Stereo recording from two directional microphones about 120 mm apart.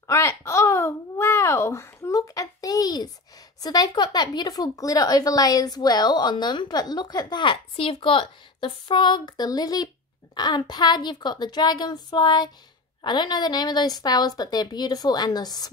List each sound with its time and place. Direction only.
0.0 s babbling: 25° left (ahead or behind)
3.6 s speech: 35° left (ahead or behind)